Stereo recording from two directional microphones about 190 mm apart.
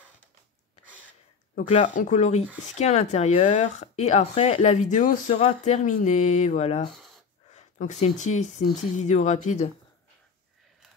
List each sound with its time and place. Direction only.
1.5 s speech: 45° left (ahead or behind)